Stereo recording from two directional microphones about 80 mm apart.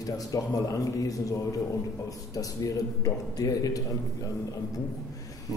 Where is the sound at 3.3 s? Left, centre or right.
Left.